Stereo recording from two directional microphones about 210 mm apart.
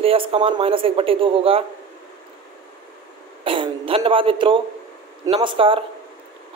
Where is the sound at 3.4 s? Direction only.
25° right (ahead or behind).